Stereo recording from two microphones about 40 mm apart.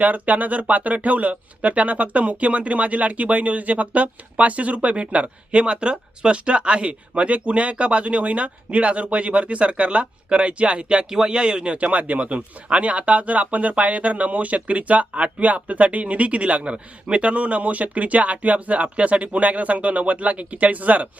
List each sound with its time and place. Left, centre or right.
0.0 s speech: right; by 11.6 s centre
11.6 s speech: right